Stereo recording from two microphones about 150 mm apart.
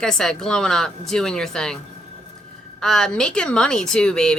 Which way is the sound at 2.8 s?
5° left (ahead or behind).